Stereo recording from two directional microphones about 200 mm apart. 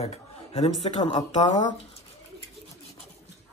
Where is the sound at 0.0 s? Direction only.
30° left (ahead or behind).